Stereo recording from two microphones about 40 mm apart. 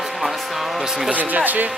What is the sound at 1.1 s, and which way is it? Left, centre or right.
Speech, right.